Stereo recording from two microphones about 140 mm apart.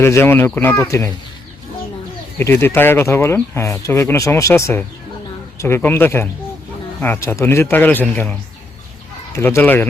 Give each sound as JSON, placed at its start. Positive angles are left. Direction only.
{"t": 0.0, "sound": "speech", "side_deg": 20}
{"t": 2.4, "sound": "speech", "side_deg": 15}
{"t": 9.3, "sound": "speech", "side_deg": 20}